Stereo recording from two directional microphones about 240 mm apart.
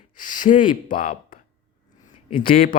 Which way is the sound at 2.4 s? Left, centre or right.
Left.